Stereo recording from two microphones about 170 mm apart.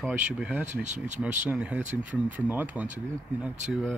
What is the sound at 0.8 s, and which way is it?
Speech, 45° right (ahead or behind).